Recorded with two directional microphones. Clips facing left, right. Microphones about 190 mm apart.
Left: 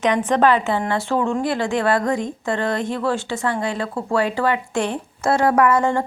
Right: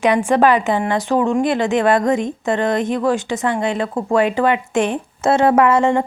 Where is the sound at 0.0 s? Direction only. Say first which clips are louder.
Right 3 dB; 10° right (ahead or behind).